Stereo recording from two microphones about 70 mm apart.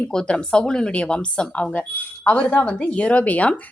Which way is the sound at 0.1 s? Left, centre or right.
Centre.